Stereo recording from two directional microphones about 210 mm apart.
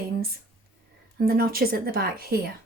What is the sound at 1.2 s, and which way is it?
Speech, 45° right (ahead or behind).